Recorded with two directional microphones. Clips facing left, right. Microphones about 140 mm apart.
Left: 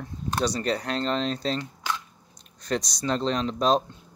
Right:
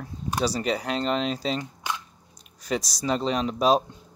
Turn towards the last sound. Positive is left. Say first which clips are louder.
# right 1 dB
turn(degrees=-5)  # may be behind; listen again after turning